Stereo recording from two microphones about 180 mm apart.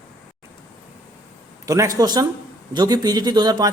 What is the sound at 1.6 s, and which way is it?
A man's voice, 20° right (ahead or behind).